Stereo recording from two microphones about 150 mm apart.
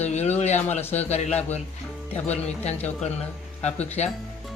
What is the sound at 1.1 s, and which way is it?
Speech, 45° left (ahead or behind).